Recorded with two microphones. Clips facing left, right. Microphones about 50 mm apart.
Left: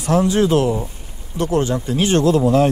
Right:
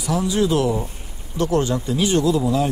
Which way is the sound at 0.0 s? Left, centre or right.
Left.